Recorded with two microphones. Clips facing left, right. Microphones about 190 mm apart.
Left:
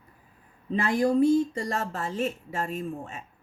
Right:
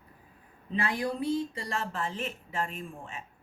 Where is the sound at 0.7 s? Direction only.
45° left (ahead or behind).